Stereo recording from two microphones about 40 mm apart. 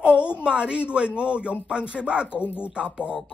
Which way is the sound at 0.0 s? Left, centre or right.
Right.